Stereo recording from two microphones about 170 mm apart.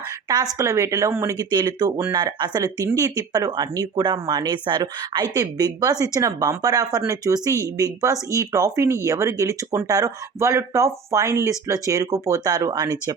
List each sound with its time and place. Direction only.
0.6 s speech: 15° right (ahead or behind)